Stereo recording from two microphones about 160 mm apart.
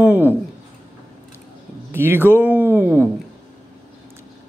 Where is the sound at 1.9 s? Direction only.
15° right (ahead or behind).